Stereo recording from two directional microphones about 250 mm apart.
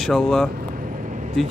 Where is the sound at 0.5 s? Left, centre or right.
Right.